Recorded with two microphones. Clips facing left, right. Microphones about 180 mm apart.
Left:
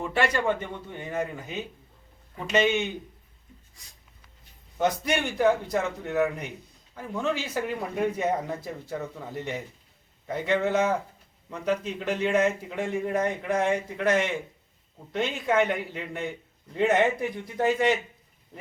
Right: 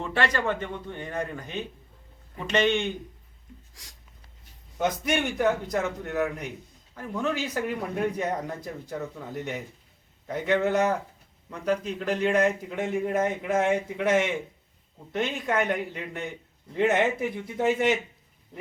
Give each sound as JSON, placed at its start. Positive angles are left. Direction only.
{"t": 0.0, "sound": "a man's voice", "side_deg": 10}
{"t": 3.8, "sound": "a sound", "side_deg": -90}
{"t": 4.8, "sound": "speech", "side_deg": 0}